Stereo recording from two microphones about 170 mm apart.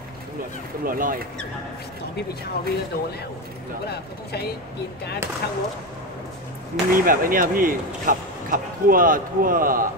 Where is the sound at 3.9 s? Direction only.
70° left (ahead or behind).